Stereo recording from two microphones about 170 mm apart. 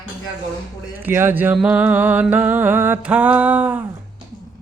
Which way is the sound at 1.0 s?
15° right (ahead or behind).